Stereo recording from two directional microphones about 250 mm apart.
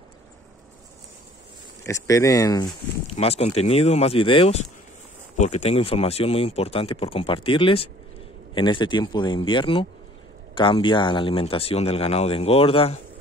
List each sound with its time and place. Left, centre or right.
1.9 s speech: centre